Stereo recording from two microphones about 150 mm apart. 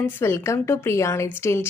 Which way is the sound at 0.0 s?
15° left (ahead or behind).